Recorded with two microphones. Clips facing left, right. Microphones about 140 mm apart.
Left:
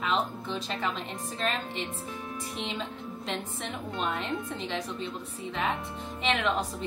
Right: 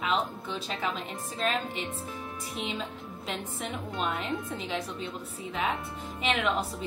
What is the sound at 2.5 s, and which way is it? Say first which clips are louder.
A woman's voice: right 2 dB; 5° right (ahead or behind).